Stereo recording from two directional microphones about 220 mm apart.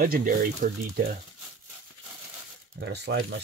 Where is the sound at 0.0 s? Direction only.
40° right (ahead or behind).